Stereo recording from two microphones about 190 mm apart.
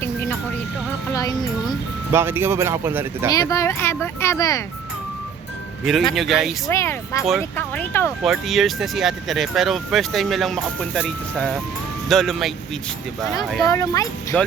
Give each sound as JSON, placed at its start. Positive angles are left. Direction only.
{"t": 0.0, "sound": "music", "side_deg": 10}
{"t": 1.1, "sound": "speech", "side_deg": 20}
{"t": 2.1, "sound": "speech", "side_deg": -10}
{"t": 3.3, "sound": "speech", "side_deg": 15}
{"t": 5.8, "sound": "speech", "side_deg": 0}
{"t": 6.7, "sound": "speech", "side_deg": 15}
{"t": 8.2, "sound": "speech", "side_deg": 0}
{"t": 13.7, "sound": "speech", "side_deg": 15}